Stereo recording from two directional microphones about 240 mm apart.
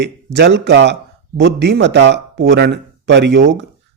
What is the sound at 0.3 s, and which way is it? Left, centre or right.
A man's voice, right.